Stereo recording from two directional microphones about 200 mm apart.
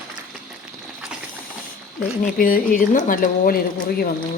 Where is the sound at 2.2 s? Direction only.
45° left (ahead or behind).